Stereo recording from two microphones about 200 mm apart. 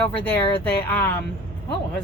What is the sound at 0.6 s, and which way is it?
Speech, 10° left (ahead or behind).